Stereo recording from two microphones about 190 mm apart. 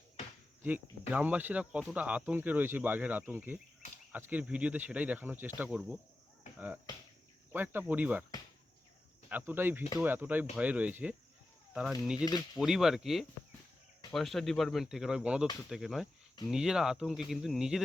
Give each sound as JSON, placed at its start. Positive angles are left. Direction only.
{"t": 0.6, "sound": "speech", "side_deg": -10}
{"t": 7.5, "sound": "speech", "side_deg": -10}
{"t": 9.3, "sound": "speech", "side_deg": -10}
{"t": 12.1, "sound": "speech", "side_deg": 20}
{"t": 12.5, "sound": "speech", "side_deg": 0}